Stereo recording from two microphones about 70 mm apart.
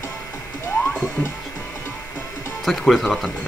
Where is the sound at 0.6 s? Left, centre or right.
Left.